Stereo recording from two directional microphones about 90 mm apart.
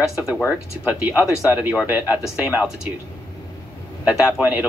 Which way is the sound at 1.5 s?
15° right (ahead or behind).